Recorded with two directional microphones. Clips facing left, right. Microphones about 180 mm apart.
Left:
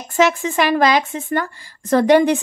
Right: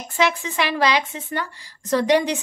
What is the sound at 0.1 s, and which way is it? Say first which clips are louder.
Speech: left 6 dB; 45° left (ahead or behind).